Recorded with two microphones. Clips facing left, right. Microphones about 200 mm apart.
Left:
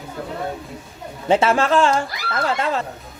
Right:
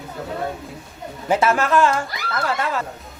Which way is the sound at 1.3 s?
25° left (ahead or behind).